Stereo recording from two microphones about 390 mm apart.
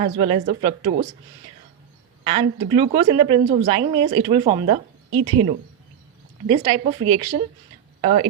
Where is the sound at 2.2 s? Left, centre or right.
Centre.